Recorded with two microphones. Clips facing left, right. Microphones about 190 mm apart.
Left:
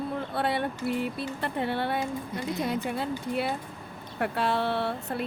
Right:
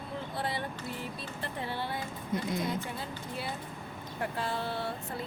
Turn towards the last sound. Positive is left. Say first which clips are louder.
# left 6 dB
turn(degrees=65)  # may be behind; listen again after turning